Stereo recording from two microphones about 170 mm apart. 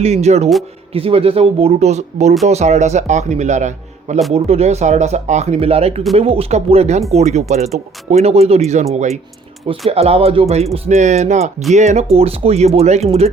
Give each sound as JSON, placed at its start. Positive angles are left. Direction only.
{"t": 0.0, "sound": "a man's voice", "side_deg": -40}